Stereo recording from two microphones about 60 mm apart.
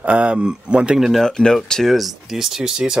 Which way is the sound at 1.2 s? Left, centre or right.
Centre.